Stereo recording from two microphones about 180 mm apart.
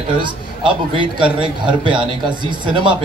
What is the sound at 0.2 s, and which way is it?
A woman's voice, 25° right (ahead or behind).